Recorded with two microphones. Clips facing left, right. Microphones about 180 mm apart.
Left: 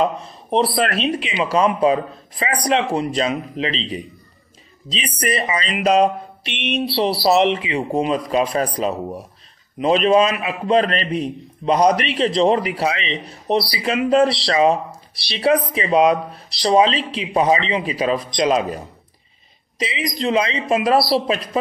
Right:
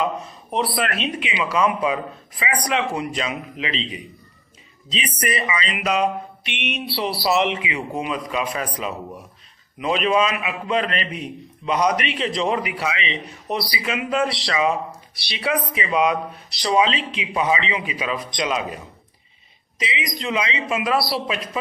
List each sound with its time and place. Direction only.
0.0 s a man's voice: 35° left (ahead or behind)